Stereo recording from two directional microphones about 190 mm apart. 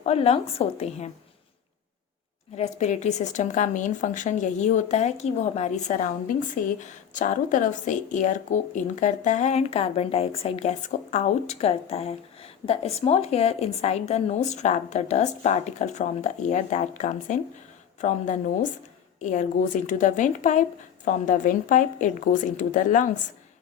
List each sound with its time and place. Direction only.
0.0 s speech: 30° left (ahead or behind)
2.6 s speech: 40° left (ahead or behind)